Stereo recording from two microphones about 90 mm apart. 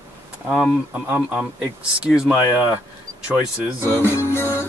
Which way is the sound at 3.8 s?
25° left (ahead or behind).